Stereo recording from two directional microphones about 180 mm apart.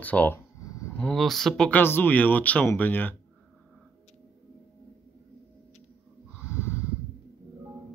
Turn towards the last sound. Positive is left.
turn(degrees=15)  # may be behind; listen again after turning